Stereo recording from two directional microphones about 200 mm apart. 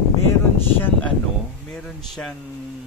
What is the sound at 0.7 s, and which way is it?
Speech, 10° left (ahead or behind).